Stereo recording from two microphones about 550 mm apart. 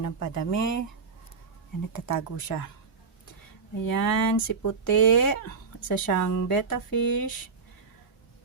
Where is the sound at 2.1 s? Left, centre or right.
Left.